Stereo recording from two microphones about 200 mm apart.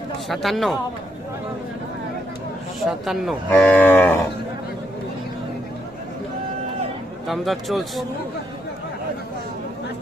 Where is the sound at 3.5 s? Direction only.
10° left (ahead or behind).